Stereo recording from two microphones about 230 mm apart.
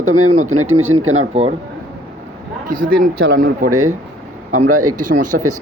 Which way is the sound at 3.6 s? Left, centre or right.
Right.